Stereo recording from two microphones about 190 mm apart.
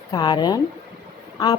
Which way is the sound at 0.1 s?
20° left (ahead or behind).